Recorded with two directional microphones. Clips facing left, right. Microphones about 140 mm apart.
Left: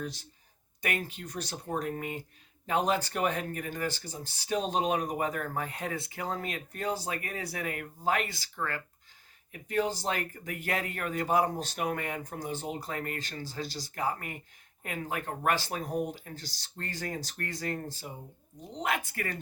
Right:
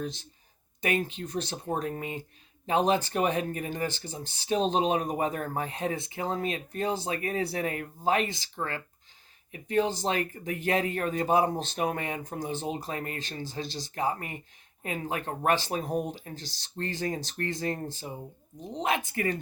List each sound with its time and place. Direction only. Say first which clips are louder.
0.0 s speech: right 3 dB; 20° right (ahead or behind)